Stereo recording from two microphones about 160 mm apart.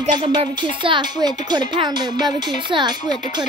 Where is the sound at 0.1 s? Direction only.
25° right (ahead or behind).